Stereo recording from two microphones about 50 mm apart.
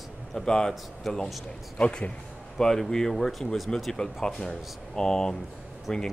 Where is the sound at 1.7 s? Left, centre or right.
Left.